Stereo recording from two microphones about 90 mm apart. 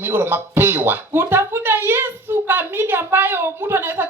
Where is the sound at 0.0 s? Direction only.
25° right (ahead or behind).